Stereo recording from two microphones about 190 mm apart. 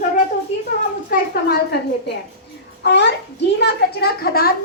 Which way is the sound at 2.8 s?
65° left (ahead or behind).